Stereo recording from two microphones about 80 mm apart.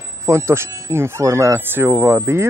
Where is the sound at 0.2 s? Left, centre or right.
Right.